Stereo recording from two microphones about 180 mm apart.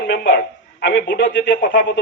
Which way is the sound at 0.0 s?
65° left (ahead or behind).